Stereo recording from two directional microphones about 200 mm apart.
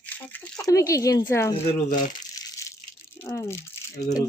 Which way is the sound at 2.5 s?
15° left (ahead or behind).